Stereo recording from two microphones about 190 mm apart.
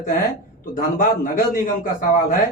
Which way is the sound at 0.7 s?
45° left (ahead or behind).